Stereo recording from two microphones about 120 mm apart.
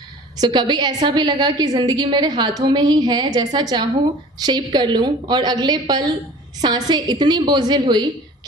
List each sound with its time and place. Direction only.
0.3 s a woman's voice: 35° right (ahead or behind)